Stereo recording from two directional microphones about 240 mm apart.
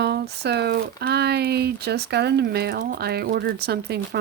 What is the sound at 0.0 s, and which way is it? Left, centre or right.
Speech, right.